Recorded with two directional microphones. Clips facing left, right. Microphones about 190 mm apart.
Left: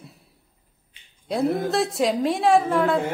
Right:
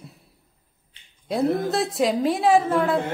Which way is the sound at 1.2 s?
Centre (ahead or behind).